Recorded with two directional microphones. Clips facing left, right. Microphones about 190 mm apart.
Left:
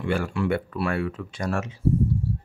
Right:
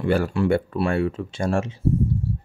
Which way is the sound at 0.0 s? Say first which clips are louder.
Right 4 dB; 35° right (ahead or behind).